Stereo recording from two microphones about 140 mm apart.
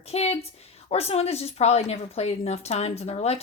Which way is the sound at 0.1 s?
50° left (ahead or behind).